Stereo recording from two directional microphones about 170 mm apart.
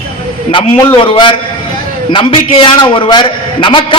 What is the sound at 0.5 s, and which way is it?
A man's voice, 30° left (ahead or behind).